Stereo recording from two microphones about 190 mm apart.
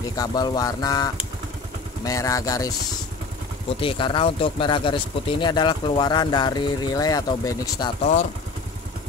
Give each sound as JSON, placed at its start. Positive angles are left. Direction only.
{"t": 0.1, "sound": "speech", "side_deg": 20}
{"t": 3.8, "sound": "speech", "side_deg": 25}